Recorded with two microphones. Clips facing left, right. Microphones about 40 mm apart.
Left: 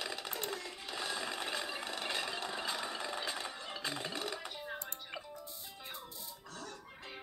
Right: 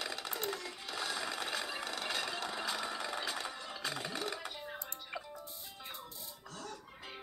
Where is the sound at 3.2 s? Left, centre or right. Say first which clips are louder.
Right 1 dB; left.